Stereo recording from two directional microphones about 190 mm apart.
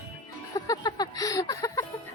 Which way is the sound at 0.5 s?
20° left (ahead or behind).